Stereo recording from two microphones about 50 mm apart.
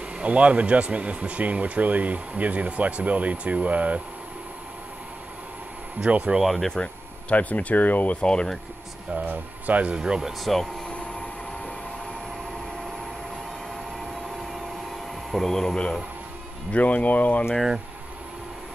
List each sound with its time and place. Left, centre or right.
0.2 s speech: right
5.9 s speech: right
6.4 s speech: centre
6.7 s speech: left
9.1 s speech: right
9.9 s speech: centre
10.4 s speech: centre
15.3 s speech: centre
16.7 s speech: left